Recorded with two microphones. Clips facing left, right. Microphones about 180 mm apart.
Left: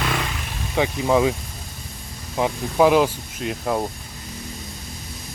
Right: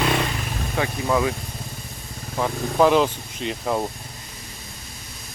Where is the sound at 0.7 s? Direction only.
15° left (ahead or behind).